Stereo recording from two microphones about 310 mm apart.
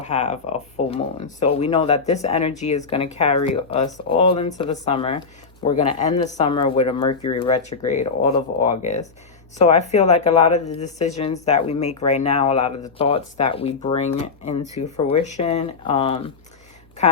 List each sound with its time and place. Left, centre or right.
0.0 s a woman's voice: left